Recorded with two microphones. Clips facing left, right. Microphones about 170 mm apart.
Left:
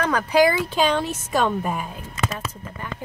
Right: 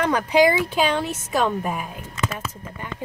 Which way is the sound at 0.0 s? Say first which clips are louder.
Right 1 dB; 20° right (ahead or behind).